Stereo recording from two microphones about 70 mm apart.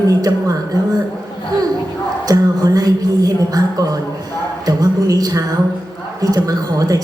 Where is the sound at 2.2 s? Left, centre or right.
Right.